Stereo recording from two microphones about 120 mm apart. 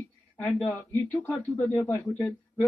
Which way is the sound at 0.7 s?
15° left (ahead or behind).